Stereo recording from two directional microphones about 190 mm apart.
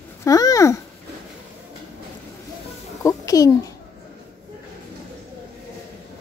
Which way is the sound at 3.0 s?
20° left (ahead or behind).